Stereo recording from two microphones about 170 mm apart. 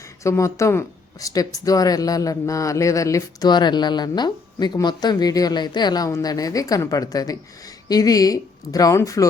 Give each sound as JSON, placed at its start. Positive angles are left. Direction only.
{"t": 0.2, "sound": "speech", "side_deg": 15}